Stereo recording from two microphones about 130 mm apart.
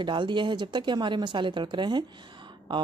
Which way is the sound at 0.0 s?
35° right (ahead or behind).